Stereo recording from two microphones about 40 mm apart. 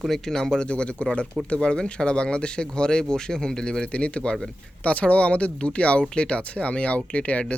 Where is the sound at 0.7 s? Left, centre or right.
Left.